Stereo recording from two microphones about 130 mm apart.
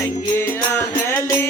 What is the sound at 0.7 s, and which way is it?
Music, 20° left (ahead or behind).